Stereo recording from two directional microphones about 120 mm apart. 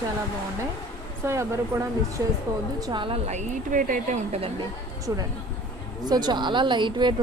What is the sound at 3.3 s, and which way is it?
Speech, 80° right.